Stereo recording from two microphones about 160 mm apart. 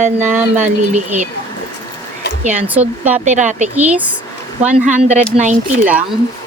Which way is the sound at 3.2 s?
50° right (ahead or behind).